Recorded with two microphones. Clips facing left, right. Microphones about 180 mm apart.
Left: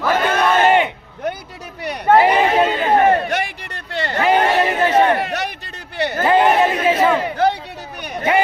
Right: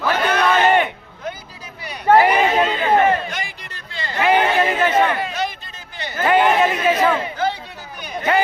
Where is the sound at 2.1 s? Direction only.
25° left (ahead or behind).